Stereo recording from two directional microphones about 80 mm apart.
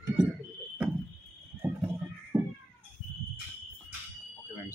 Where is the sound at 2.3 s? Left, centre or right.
Right.